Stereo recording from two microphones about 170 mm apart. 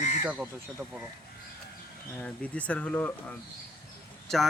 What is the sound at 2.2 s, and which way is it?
Speech, 10° left (ahead or behind).